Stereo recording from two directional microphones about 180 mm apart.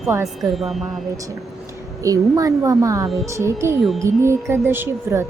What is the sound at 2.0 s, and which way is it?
Speech, 20° right (ahead or behind).